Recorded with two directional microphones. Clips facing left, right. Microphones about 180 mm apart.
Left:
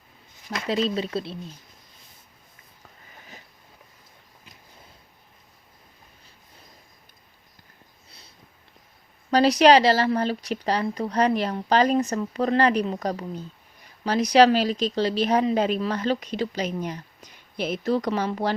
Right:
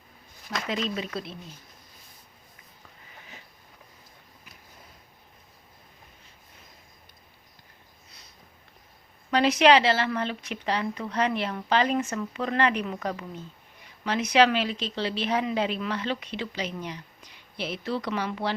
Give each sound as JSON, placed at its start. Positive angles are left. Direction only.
{"t": 0.7, "sound": "a woman's voice", "side_deg": 35}
{"t": 9.3, "sound": "a woman's voice", "side_deg": 35}